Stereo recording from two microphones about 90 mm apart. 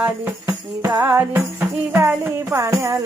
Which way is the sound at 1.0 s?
25° right (ahead or behind).